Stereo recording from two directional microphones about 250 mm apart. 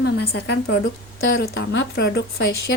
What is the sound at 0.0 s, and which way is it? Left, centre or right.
Speech, left.